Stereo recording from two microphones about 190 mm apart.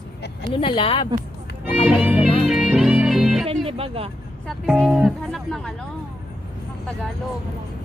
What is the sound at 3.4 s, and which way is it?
Speech, 30° right (ahead or behind).